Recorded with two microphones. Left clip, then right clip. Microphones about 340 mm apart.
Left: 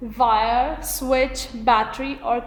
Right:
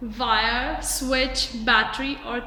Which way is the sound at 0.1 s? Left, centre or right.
Centre.